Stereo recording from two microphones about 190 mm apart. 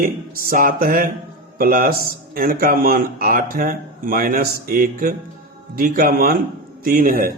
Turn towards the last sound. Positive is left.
turn(degrees=-50)  # may be behind; listen again after turning